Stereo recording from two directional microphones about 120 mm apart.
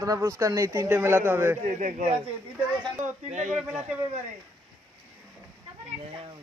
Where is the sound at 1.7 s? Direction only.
90° right.